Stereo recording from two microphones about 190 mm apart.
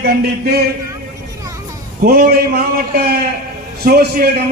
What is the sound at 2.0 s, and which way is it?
A man's voice, 50° right (ahead or behind).